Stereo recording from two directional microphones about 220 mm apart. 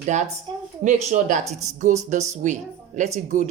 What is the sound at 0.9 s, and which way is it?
Speech, 30° right (ahead or behind).